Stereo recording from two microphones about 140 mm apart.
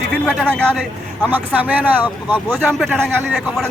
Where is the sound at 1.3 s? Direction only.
10° right (ahead or behind).